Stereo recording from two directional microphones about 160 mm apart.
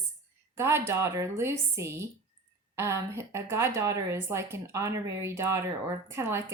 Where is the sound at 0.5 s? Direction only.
15° right (ahead or behind).